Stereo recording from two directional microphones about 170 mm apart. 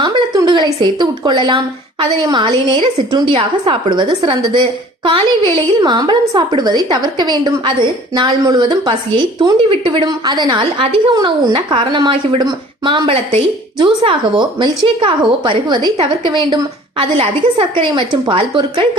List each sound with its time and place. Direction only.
0.0 s a woman's voice: 25° right (ahead or behind)